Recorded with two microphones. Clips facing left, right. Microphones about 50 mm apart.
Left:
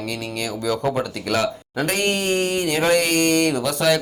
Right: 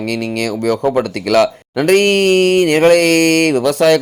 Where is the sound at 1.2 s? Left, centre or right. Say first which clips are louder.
Right 11 dB; right.